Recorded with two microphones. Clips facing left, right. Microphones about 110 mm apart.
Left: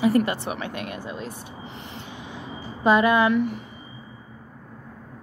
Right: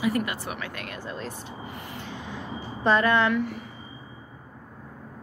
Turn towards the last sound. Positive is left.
turn(degrees=20)  # may be behind; listen again after turning